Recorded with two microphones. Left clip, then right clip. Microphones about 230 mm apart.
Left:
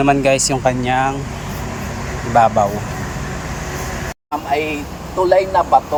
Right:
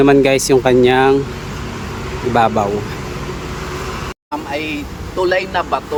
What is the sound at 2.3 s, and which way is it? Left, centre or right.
Speech, centre.